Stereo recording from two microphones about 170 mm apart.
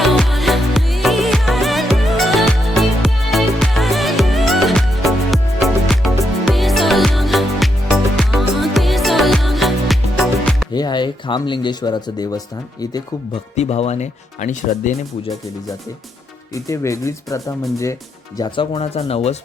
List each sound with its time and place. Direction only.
0.0 s music: centre (ahead or behind)
10.7 s speech: 25° left (ahead or behind)
13.6 s speech: 40° left (ahead or behind)
16.6 s speech: 20° left (ahead or behind); by 19.4 s 35° left (ahead or behind)